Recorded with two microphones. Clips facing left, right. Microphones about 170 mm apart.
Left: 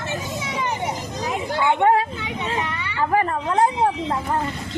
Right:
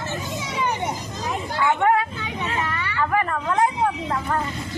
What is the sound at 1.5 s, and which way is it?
Speech, 20° left (ahead or behind).